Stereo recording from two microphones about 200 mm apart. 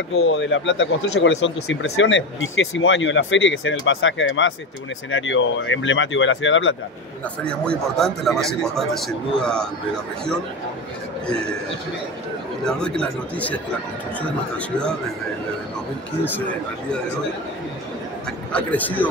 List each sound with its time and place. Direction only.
0.1 s speech: 70° left (ahead or behind)
7.4 s speech: 5° left (ahead or behind)
12.6 s speech: 5° left (ahead or behind)
18.5 s a man's voice: 10° left (ahead or behind)